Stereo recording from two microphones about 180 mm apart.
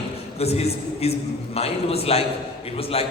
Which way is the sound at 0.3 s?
35° left (ahead or behind).